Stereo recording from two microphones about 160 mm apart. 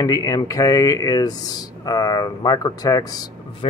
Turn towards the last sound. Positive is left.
turn(degrees=25)  # may be behind; listen again after turning